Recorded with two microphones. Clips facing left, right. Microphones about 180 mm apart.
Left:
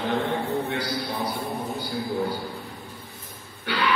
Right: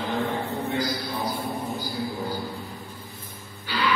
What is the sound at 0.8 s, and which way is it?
A man's voice, 65° left (ahead or behind).